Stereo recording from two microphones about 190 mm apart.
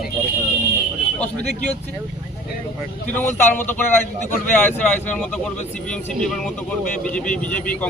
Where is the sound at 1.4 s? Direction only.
60° right (ahead or behind).